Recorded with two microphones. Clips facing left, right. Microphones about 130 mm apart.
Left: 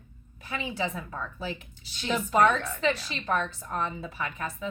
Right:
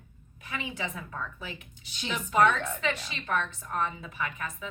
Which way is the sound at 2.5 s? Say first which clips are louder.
Left 3 dB; 35° left (ahead or behind).